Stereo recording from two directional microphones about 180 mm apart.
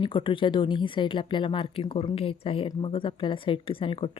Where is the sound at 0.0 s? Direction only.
30° left (ahead or behind).